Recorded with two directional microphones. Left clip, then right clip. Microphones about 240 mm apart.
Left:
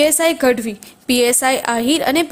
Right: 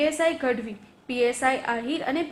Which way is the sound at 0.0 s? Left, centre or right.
Left.